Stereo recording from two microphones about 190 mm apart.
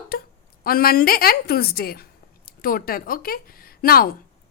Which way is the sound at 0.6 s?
50° left (ahead or behind).